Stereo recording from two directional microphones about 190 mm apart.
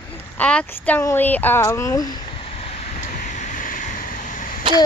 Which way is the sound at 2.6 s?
40° left (ahead or behind).